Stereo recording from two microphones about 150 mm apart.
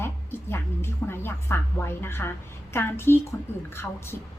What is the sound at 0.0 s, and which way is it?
Music, 15° left (ahead or behind).